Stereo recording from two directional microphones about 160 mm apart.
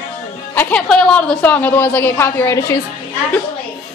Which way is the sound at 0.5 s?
10° left (ahead or behind).